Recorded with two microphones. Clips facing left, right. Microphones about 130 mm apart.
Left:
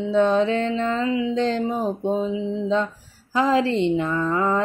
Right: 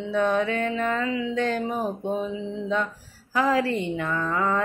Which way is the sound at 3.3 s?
25° left (ahead or behind).